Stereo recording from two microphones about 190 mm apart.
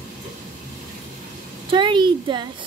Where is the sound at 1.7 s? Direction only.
25° right (ahead or behind).